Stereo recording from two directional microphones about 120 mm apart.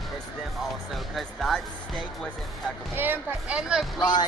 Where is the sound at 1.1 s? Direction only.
Centre (ahead or behind).